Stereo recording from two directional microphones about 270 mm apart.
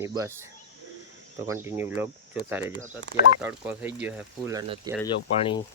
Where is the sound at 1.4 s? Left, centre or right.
Centre.